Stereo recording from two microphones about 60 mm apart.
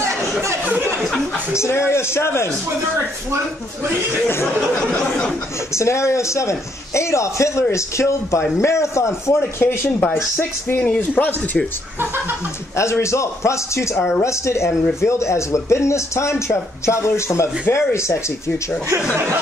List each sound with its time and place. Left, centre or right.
0.0 s a sound: right
1.5 s speech: left
4.7 s a sound: centre
5.8 s a man's voice: left
9.6 s speech: left
13.0 s a man's voice: left